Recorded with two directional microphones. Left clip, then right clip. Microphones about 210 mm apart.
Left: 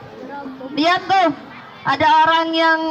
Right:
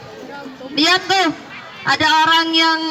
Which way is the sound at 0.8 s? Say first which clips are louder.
Even; 40° left (ahead or behind).